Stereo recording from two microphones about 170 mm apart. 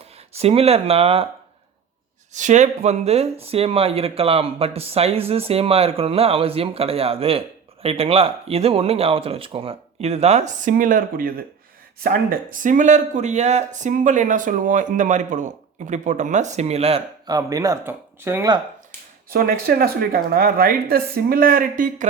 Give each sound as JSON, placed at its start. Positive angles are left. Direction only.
{"t": 0.3, "sound": "speech", "side_deg": -35}
{"t": 2.3, "sound": "speech", "side_deg": -45}
{"t": 17.2, "sound": "speech", "side_deg": -20}
{"t": 19.3, "sound": "speech", "side_deg": -60}